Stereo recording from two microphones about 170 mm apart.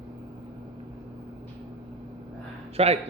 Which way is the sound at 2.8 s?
35° right (ahead or behind).